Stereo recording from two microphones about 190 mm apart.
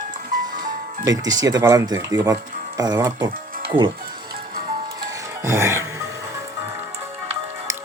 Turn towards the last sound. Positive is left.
turn(degrees=-15)  # may be behind; listen again after turning